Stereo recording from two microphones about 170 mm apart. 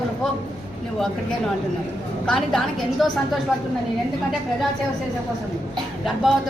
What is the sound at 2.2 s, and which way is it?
Speech, 5° left (ahead or behind).